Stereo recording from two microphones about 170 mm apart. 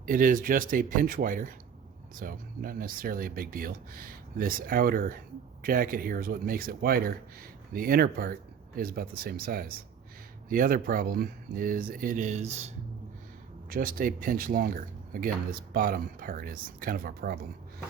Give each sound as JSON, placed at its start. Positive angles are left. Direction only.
{"t": 0.0, "sound": "speech", "side_deg": -55}
{"t": 13.7, "sound": "speech", "side_deg": -55}